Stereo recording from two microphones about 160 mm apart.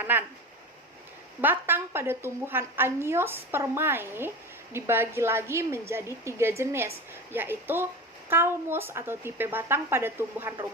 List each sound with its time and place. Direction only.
0.0 s speech: 10° right (ahead or behind)
1.4 s a woman's voice: 10° right (ahead or behind)